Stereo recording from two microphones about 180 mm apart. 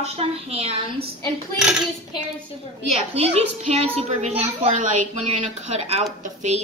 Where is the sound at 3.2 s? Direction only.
35° right (ahead or behind).